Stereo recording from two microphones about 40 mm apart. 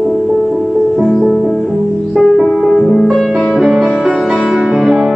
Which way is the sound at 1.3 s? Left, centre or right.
Centre.